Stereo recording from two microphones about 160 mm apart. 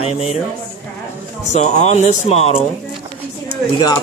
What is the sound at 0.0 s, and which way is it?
Speech, 40° left (ahead or behind).